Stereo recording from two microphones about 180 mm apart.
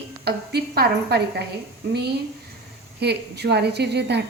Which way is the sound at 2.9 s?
65° right (ahead or behind).